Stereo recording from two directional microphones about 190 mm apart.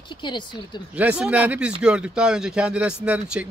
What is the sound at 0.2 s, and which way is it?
Speech, 25° left (ahead or behind).